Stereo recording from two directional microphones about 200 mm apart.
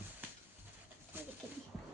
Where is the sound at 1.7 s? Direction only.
5° right (ahead or behind).